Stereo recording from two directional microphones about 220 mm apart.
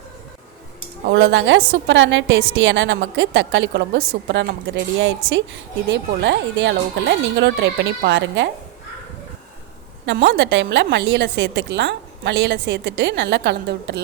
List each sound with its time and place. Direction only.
1.1 s a woman's voice: 55° right (ahead or behind)
10.1 s a woman's voice: 55° right (ahead or behind)